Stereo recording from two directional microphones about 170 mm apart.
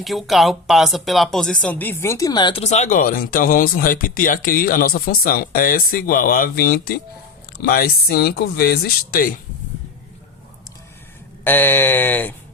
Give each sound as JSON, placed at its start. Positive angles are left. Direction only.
{"t": 0.0, "sound": "speech", "side_deg": 0}
{"t": 11.4, "sound": "speech", "side_deg": 10}